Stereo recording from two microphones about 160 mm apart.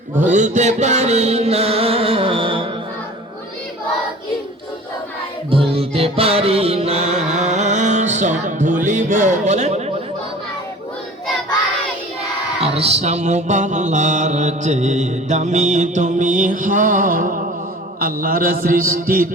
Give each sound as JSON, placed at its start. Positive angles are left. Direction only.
{"t": 0.3, "sound": "music", "side_deg": -50}
{"t": 5.5, "sound": "music", "side_deg": -35}
{"t": 12.5, "sound": "mantra", "side_deg": -40}
{"t": 18.0, "sound": "a man's voice", "side_deg": -60}